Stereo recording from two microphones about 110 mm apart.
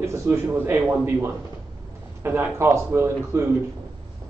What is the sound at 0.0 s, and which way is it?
A man's voice, 25° right (ahead or behind).